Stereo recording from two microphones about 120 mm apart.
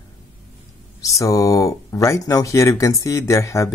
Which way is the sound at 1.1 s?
30° left (ahead or behind).